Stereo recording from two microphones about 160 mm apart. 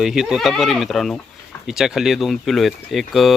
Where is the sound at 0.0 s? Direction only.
Centre (ahead or behind).